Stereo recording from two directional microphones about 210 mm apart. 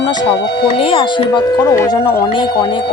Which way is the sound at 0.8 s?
25° left (ahead or behind).